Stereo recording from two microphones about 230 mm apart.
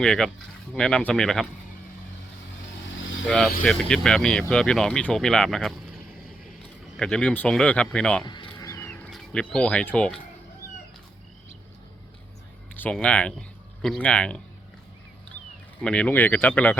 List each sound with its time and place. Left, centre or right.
0.0 s speech: centre
3.2 s speech: centre
6.9 s speech: centre
8.2 s a sound: centre
9.0 s speech: centre
12.7 s speech: centre
15.8 s speech: centre